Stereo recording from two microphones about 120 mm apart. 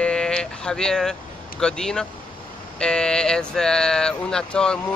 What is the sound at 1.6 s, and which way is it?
Speech, 5° left (ahead or behind).